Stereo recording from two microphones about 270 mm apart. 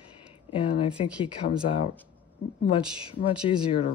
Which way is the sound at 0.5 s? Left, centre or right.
Centre.